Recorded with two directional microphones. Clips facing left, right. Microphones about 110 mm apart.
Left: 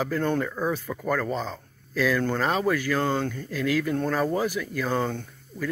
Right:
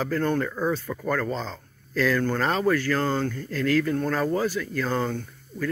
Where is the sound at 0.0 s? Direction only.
15° left (ahead or behind).